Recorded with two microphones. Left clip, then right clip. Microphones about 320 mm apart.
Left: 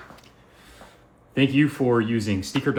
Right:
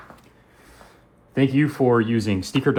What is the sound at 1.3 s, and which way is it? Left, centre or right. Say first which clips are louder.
Speech: even; centre.